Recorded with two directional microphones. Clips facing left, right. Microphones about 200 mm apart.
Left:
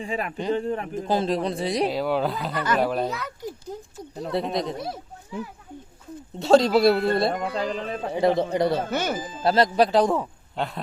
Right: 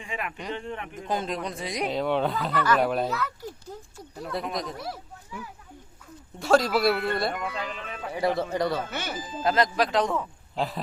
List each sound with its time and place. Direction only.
0.0 s speech: 35° left (ahead or behind)
1.9 s speech: 5° left (ahead or behind)
2.5 s speech: 20° left (ahead or behind)
2.8 s speech: centre (ahead or behind)
3.1 s speech: 15° left (ahead or behind)
8.8 s speech: 40° left (ahead or behind)
9.4 s speech: 35° left (ahead or behind)
10.5 s speech: centre (ahead or behind)